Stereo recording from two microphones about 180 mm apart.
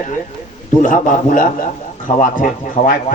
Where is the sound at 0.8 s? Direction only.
45° left (ahead or behind).